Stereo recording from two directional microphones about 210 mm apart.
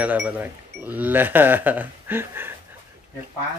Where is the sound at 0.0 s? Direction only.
5° right (ahead or behind).